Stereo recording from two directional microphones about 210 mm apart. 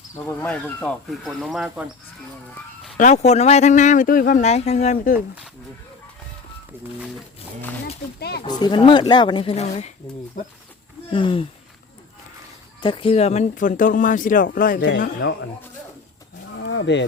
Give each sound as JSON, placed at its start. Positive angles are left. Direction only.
{"t": 0.3, "sound": "speech", "side_deg": 10}
{"t": 3.0, "sound": "speech", "side_deg": 35}
{"t": 6.7, "sound": "speech", "side_deg": -10}
{"t": 8.4, "sound": "speech", "side_deg": 20}
{"t": 11.1, "sound": "speech", "side_deg": 25}
{"t": 12.8, "sound": "speech", "side_deg": 25}
{"t": 14.8, "sound": "speech", "side_deg": 55}
{"t": 16.6, "sound": "wild animals", "side_deg": 60}